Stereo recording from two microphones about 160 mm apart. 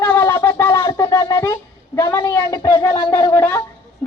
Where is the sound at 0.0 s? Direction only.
15° left (ahead or behind).